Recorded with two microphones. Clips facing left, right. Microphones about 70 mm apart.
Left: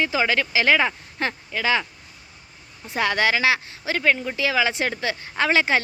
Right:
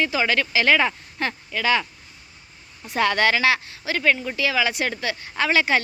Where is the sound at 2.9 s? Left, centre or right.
Centre.